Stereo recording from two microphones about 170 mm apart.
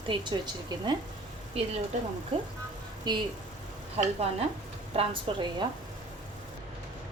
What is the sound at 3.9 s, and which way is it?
A woman's voice, 35° right (ahead or behind).